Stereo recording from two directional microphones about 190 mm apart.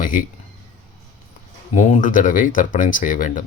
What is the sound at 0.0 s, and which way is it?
Speech, 45° left (ahead or behind).